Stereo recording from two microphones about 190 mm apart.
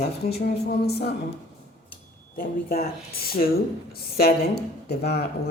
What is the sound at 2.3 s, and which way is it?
A woman's voice, 50° left (ahead or behind).